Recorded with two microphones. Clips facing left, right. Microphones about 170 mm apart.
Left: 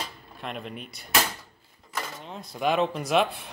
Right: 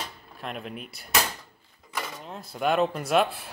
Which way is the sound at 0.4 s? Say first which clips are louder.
Even; centre (ahead or behind).